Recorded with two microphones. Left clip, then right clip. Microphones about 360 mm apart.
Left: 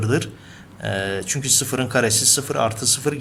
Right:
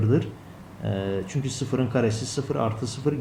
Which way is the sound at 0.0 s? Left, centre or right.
Left.